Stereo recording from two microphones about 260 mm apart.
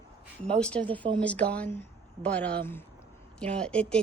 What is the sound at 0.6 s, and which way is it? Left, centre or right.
Speech, centre.